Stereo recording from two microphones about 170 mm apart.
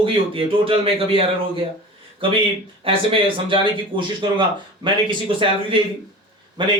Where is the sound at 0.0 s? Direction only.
30° right (ahead or behind).